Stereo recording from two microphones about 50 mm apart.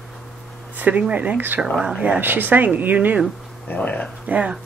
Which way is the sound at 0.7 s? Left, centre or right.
Right.